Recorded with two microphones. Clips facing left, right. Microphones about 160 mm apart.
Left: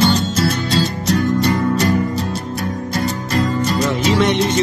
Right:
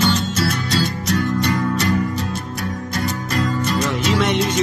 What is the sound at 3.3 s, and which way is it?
Music, 35° left (ahead or behind).